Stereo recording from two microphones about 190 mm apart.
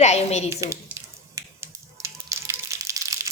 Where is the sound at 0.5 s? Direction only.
15° right (ahead or behind).